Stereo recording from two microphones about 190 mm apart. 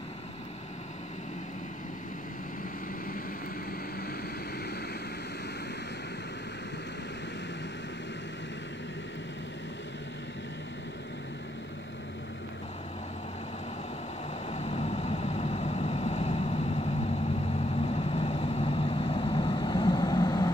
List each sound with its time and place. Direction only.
14.5 s vehicle: 35° left (ahead or behind)